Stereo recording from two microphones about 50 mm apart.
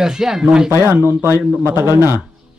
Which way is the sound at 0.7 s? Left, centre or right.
Right.